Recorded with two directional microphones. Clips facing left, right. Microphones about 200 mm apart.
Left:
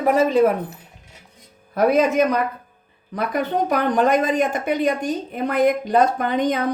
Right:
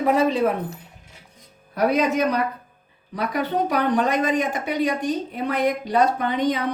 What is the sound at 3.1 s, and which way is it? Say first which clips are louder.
A woman's voice: left 2 dB; 50° left (ahead or behind).